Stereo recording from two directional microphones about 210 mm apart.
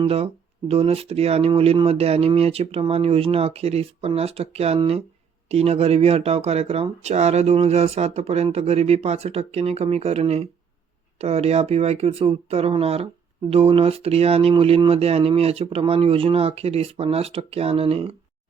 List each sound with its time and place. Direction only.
0.0 s speech: 30° right (ahead or behind)